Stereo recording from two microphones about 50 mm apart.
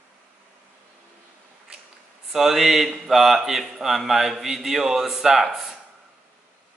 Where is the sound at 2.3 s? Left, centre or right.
Centre.